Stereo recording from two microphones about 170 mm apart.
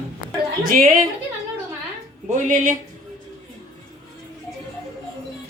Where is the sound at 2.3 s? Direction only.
45° right (ahead or behind).